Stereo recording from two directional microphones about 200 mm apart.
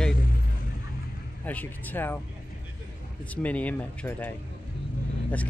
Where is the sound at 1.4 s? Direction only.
10° left (ahead or behind).